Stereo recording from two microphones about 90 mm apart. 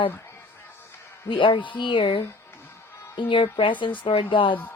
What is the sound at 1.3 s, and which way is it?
A woman's voice, 70° left (ahead or behind).